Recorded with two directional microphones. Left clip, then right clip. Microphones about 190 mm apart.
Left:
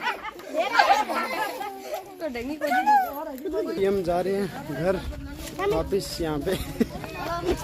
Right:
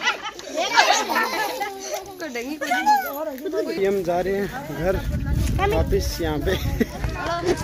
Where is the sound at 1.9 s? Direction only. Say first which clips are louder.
Right 2 dB; 45° left (ahead or behind).